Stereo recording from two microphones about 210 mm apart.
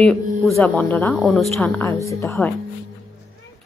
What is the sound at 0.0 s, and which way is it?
Speech, 5° left (ahead or behind).